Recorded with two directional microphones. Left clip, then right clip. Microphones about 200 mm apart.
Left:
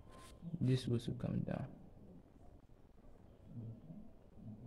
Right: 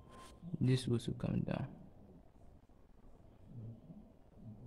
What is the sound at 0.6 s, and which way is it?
Speech, 10° right (ahead or behind).